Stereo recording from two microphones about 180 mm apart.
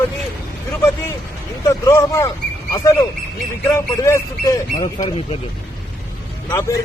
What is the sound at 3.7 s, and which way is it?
A man's voice, 15° left (ahead or behind).